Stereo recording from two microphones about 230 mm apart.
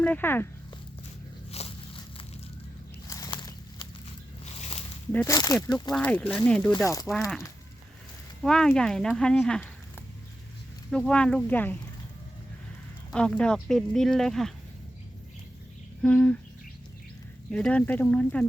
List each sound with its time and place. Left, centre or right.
0.0 s speech: centre
1.5 s a sound: left
5.1 s speech: centre
5.9 s speech: centre
8.4 s speech: centre
10.9 s speech: centre
13.1 s speech: centre
16.0 s speech: centre
17.5 s speech: centre